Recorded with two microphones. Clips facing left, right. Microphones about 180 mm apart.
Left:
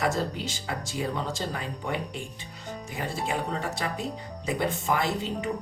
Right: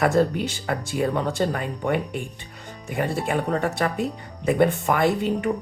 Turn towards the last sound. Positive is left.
turn(degrees=-60)  # may be behind; listen again after turning